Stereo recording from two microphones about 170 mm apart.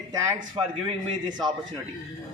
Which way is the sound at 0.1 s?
20° right (ahead or behind).